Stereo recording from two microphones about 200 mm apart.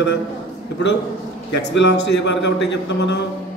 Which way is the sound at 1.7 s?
60° left (ahead or behind).